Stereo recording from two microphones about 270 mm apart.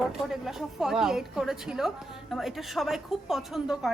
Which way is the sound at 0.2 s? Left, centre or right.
Centre.